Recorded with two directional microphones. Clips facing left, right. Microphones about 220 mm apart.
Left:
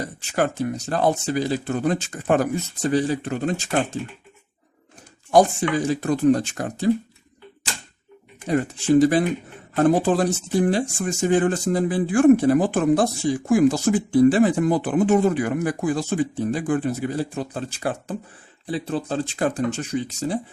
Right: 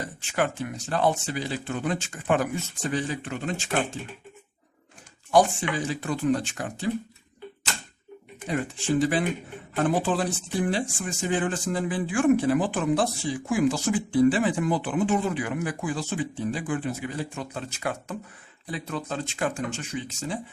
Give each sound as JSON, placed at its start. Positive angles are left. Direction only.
{"t": 0.0, "sound": "speech", "side_deg": 40}
{"t": 5.9, "sound": "speech", "side_deg": 40}
{"t": 8.4, "sound": "speech", "side_deg": 40}